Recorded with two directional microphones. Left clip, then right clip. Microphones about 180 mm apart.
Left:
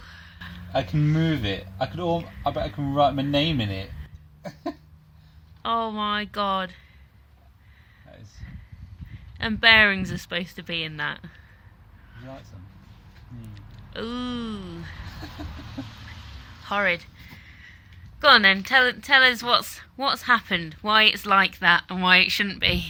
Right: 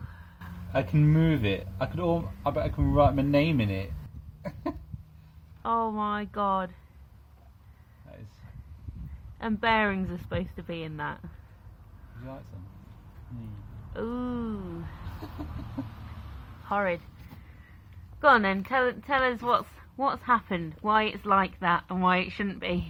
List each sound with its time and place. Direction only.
0.1 s a sound: 15° left (ahead or behind)
1.2 s speech: 20° right (ahead or behind)
2.1 s a woman's voice: 10° left (ahead or behind)
2.7 s speech: 5° right (ahead or behind)
5.6 s a woman's voice: 10° left (ahead or behind)
9.4 s a woman's voice: 10° left (ahead or behind)
13.9 s a woman's voice: 10° left (ahead or behind)
16.6 s a woman's voice: 10° left (ahead or behind)
18.2 s a woman's voice: 5° left (ahead or behind)